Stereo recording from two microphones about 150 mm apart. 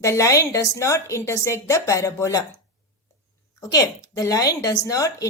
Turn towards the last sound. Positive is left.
turn(degrees=20)  # may be behind; listen again after turning